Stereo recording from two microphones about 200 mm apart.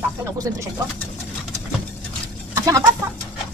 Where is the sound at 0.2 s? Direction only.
15° right (ahead or behind).